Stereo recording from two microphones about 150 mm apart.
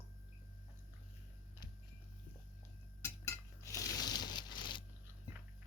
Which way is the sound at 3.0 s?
20° left (ahead or behind).